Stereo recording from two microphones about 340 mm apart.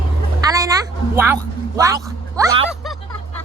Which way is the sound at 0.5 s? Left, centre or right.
Centre.